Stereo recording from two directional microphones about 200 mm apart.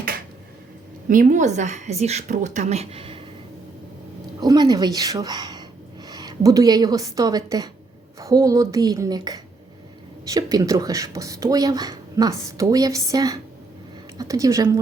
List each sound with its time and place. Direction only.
1.0 s a woman's voice: 40° right (ahead or behind)
4.4 s a woman's voice: 20° right (ahead or behind)